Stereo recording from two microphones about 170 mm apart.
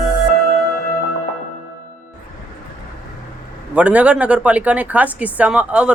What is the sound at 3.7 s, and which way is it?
A man's voice, 5° right (ahead or behind).